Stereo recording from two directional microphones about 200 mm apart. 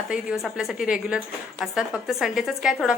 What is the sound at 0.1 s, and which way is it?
A woman's voice, 5° right (ahead or behind).